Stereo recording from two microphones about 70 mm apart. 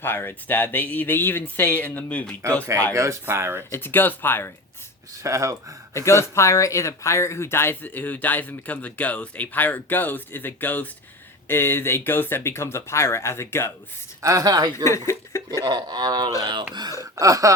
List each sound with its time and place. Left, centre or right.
0.0 s speech: left
2.9 s speech: right
3.7 s speech: left
5.2 s speech: right
5.9 s speech: left
14.2 s speech: right
14.8 s speech: left
15.6 s speech: right
17.0 s gasp: right